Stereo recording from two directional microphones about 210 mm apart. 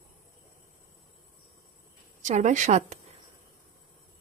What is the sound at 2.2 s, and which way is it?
Speech, 35° right (ahead or behind).